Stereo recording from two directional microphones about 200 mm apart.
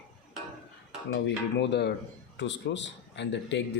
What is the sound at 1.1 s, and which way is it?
Speech, 60° left (ahead or behind).